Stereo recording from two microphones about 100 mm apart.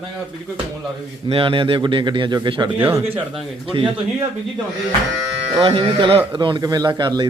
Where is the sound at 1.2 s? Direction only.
60° right (ahead or behind).